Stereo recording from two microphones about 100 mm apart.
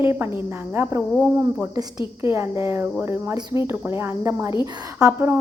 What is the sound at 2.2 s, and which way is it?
Speech, 25° right (ahead or behind).